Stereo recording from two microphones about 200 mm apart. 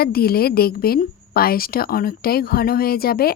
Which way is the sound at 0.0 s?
50° left (ahead or behind).